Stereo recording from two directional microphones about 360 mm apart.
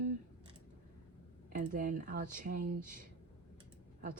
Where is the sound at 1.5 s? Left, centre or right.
Right.